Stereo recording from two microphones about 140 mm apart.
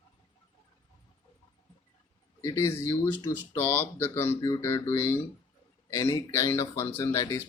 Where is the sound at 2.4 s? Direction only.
20° left (ahead or behind).